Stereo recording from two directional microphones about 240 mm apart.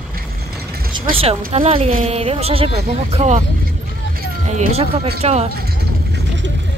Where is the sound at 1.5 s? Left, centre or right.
Right.